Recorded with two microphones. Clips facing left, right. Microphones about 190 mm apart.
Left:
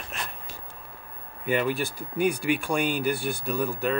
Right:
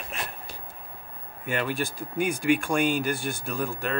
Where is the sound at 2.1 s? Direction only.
50° right (ahead or behind).